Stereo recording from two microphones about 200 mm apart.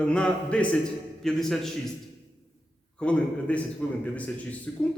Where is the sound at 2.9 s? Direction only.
5° left (ahead or behind).